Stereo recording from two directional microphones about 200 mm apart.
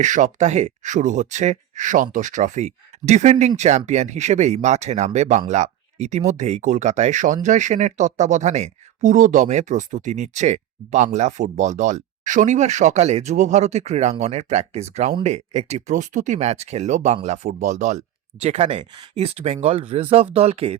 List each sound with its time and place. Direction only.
0.0 s speech: 40° right (ahead or behind)